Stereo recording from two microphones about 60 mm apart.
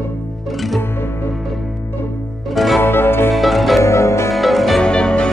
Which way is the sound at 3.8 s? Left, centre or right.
Left.